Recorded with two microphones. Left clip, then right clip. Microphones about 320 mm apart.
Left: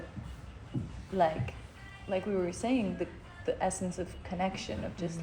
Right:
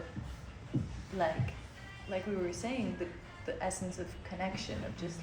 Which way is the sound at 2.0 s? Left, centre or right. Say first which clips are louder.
Left 4 dB; centre.